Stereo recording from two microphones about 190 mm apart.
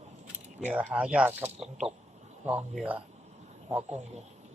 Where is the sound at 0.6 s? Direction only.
10° right (ahead or behind).